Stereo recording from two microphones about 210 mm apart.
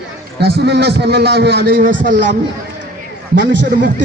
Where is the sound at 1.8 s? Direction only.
40° right (ahead or behind).